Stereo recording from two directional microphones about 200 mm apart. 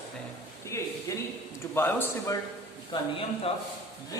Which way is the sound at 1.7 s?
10° left (ahead or behind).